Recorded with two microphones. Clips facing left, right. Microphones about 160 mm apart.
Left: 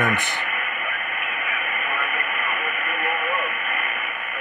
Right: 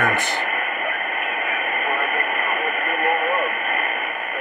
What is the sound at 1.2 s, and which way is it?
Radio, 40° right (ahead or behind).